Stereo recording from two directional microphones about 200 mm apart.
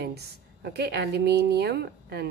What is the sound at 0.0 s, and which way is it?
Speech, 55° right (ahead or behind).